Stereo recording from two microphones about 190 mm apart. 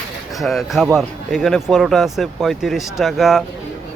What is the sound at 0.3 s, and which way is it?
Speech, centre (ahead or behind).